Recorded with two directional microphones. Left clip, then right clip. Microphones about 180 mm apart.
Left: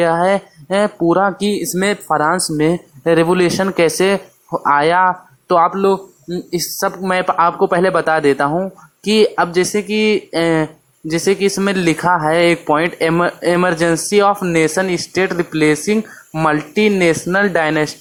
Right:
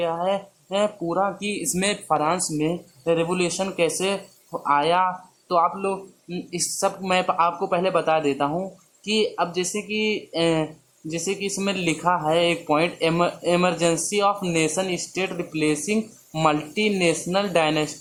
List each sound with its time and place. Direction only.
0.0 s speech: 30° left (ahead or behind)